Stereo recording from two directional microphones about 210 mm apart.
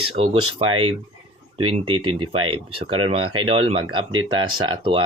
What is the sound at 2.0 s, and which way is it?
Speech, 25° right (ahead or behind).